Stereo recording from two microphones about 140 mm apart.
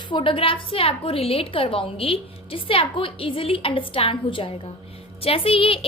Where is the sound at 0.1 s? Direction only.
40° left (ahead or behind).